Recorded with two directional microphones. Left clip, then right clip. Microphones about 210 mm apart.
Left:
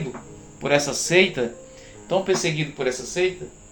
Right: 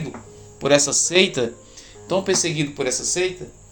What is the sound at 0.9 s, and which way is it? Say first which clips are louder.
Speech: right 1 dB; 35° right (ahead or behind).